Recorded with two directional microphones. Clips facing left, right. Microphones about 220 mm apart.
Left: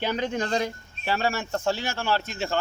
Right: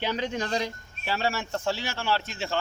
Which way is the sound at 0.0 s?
50° left (ahead or behind).